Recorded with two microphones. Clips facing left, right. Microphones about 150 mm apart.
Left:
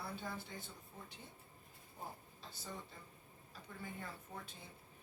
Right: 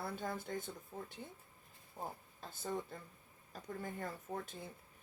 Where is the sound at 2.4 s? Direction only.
50° right (ahead or behind).